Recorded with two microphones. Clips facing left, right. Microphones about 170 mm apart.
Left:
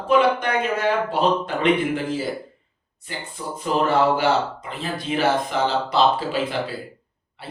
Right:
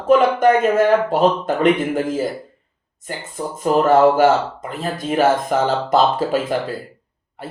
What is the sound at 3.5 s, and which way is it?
Speech, 45° right (ahead or behind).